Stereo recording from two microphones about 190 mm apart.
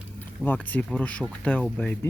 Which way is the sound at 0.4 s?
10° left (ahead or behind).